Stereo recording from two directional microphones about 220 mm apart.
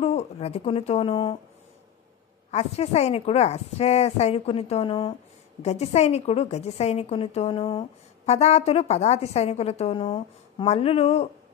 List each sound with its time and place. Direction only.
0.0 s speech: 30° left (ahead or behind)
2.5 s a woman's voice: 30° left (ahead or behind)